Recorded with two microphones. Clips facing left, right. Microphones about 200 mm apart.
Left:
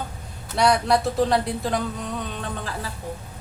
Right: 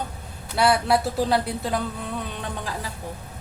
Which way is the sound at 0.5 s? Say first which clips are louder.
Left 1 dB; 5° right (ahead or behind).